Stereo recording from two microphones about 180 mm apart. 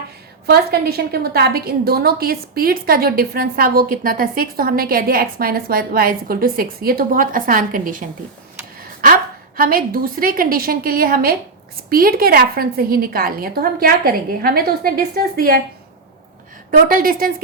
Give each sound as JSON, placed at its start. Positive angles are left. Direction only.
{"t": 0.4, "sound": "a woman's voice", "side_deg": -60}
{"t": 8.8, "sound": "a sound", "side_deg": -55}
{"t": 9.6, "sound": "a woman's voice", "side_deg": -55}
{"t": 16.7, "sound": "a woman's voice", "side_deg": -50}